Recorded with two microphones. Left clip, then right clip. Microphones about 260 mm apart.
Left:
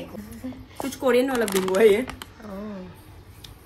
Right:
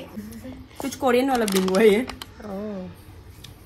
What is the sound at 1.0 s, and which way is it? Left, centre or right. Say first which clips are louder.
Speech: right 1 dB; centre.